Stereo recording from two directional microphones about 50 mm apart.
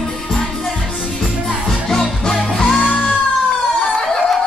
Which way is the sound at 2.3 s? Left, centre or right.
Centre.